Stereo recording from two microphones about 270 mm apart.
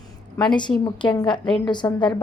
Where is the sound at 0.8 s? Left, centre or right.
Centre.